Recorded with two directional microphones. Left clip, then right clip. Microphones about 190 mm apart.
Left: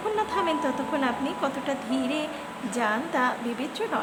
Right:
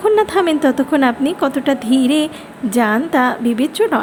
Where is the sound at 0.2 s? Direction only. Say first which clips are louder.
Right 11 dB; 40° right (ahead or behind).